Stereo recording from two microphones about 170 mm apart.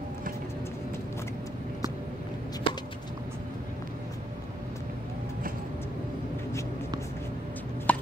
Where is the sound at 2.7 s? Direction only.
30° left (ahead or behind).